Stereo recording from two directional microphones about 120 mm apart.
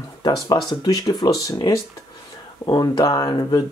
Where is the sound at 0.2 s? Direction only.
35° left (ahead or behind).